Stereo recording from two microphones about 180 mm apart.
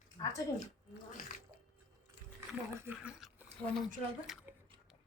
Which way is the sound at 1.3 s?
50° left (ahead or behind).